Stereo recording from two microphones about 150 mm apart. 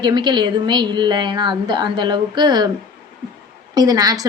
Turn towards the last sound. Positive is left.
turn(degrees=-25)  # may be behind; listen again after turning